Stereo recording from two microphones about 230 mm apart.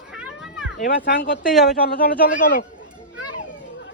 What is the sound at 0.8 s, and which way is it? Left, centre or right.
Speech, left.